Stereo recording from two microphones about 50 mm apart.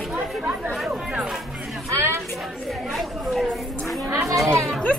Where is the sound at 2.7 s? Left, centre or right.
Centre.